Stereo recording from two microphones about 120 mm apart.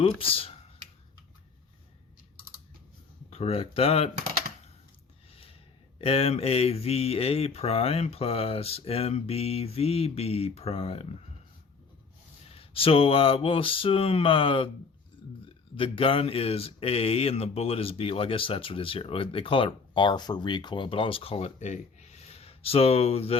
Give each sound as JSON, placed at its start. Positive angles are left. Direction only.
{"t": 0.0, "sound": "speech", "side_deg": 50}
{"t": 3.2, "sound": "speech", "side_deg": 55}
{"t": 5.3, "sound": "a sound", "side_deg": 50}
{"t": 6.0, "sound": "speech", "side_deg": 55}
{"t": 12.5, "sound": "speech", "side_deg": 50}
{"t": 15.7, "sound": "speech", "side_deg": 50}